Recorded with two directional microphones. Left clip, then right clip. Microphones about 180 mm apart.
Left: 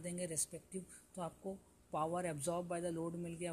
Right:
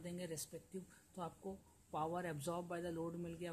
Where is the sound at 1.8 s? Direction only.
20° left (ahead or behind).